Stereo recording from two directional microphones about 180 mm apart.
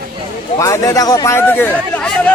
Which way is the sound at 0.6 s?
20° left (ahead or behind).